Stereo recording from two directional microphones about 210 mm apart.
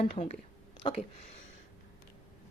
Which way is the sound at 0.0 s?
30° left (ahead or behind).